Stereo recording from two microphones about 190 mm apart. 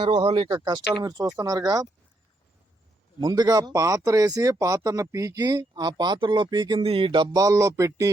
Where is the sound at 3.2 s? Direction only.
20° right (ahead or behind).